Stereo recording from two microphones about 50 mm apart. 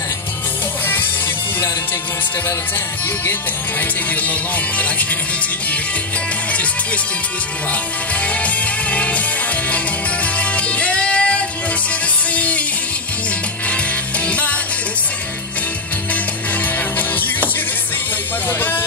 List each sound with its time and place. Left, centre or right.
4.1 s music: left
8.2 s music: left
10.2 s music: left
14.2 s music: left
17.1 s music: left
18.5 s speech: left